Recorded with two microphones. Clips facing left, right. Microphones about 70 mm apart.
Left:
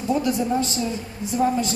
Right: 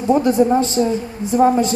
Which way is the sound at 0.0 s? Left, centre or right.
Right.